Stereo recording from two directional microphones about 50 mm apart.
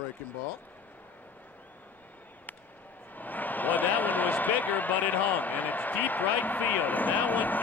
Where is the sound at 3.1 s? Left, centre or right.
Left.